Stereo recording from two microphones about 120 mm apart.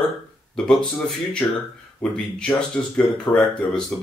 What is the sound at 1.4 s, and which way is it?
Speech, 15° left (ahead or behind).